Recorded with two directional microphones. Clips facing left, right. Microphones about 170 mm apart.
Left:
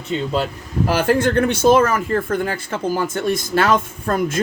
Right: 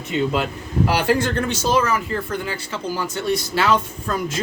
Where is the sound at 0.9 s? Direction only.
45° left (ahead or behind).